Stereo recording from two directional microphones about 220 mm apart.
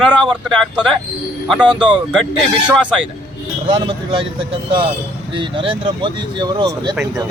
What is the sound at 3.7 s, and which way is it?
Speech, 25° right (ahead or behind).